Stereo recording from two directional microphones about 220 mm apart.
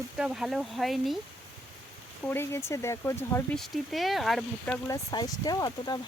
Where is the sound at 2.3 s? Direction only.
10° left (ahead or behind).